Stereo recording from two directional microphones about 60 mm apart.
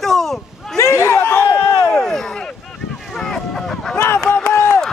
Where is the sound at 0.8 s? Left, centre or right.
Left.